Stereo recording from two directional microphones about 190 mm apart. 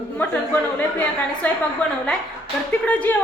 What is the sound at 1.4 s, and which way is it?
Speech, 10° left (ahead or behind).